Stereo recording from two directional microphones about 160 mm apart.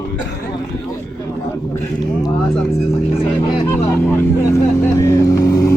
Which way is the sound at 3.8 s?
15° left (ahead or behind).